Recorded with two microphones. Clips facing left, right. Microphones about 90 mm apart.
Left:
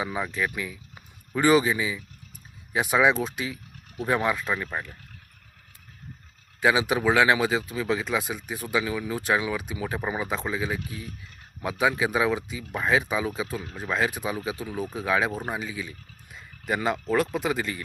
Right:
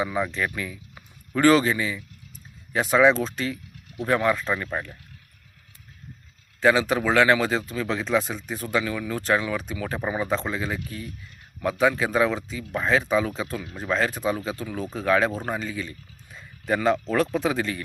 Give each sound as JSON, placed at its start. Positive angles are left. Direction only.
{"t": 0.0, "sound": "speech", "side_deg": 10}
{"t": 4.5, "sound": "speech", "side_deg": 0}
{"t": 6.6, "sound": "speech", "side_deg": 10}